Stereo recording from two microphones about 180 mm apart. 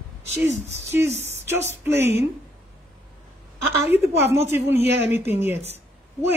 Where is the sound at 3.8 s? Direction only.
10° right (ahead or behind).